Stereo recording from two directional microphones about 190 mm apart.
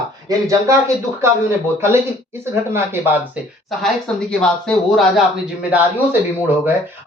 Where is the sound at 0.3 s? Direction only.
20° right (ahead or behind).